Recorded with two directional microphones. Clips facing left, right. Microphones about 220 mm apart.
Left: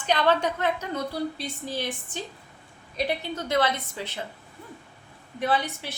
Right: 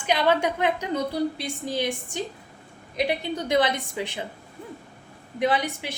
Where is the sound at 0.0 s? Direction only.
10° right (ahead or behind).